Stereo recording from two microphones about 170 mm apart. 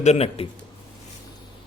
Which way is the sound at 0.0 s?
40° left (ahead or behind).